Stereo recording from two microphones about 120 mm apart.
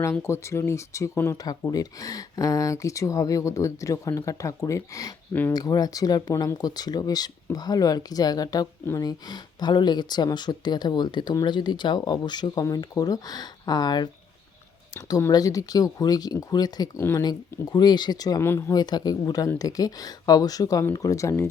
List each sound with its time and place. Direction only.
0.0 s speech: 25° left (ahead or behind)
5.3 s speech: 15° left (ahead or behind)
5.5 s speech: 35° left (ahead or behind)
15.3 s speech: 30° left (ahead or behind)
17.2 s speech: 35° left (ahead or behind)